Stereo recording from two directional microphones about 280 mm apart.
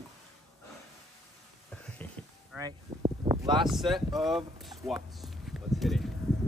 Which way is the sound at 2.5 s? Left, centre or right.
Centre.